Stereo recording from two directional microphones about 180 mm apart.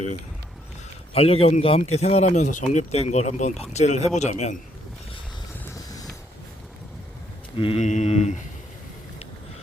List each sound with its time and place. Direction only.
1.1 s speech: 35° left (ahead or behind)
5.7 s music: 20° left (ahead or behind)
7.5 s speech: 30° left (ahead or behind)